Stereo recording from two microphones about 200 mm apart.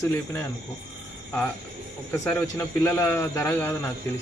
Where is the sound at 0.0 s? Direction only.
15° left (ahead or behind).